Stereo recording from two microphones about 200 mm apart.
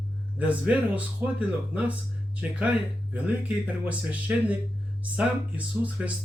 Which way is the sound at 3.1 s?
5° right (ahead or behind).